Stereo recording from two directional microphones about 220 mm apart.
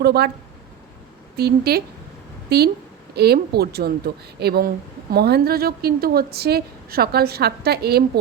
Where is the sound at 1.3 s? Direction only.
45° right (ahead or behind).